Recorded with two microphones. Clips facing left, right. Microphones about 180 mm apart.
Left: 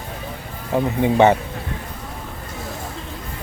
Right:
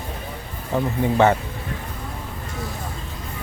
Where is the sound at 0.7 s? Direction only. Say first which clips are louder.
Left 3 dB; 20° left (ahead or behind).